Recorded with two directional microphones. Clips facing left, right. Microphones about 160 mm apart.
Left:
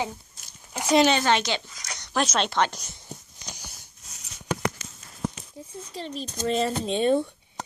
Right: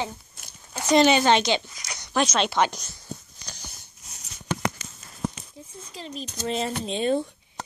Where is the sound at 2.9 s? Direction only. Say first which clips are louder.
Right 3 dB; 20° left (ahead or behind).